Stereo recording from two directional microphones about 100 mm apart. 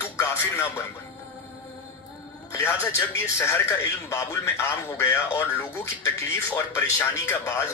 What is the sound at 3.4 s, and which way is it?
Speech, 25° left (ahead or behind).